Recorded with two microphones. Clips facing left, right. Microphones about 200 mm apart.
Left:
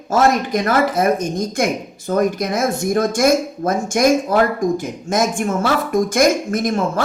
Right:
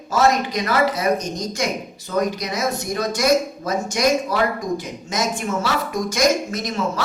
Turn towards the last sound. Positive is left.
turn(degrees=50)  # may be behind; listen again after turning